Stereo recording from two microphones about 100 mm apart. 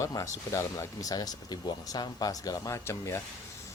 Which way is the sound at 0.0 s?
35° left (ahead or behind).